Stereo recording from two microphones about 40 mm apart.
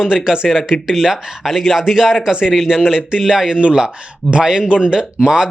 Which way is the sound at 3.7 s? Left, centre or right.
Right.